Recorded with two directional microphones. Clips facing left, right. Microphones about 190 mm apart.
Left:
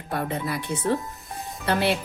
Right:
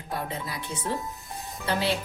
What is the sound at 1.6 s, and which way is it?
Music, 60° left (ahead or behind).